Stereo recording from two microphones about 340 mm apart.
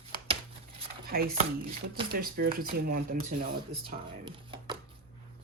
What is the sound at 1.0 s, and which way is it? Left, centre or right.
Speech, right.